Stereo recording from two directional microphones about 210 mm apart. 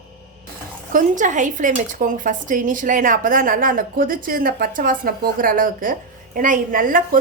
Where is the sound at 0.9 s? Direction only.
35° right (ahead or behind).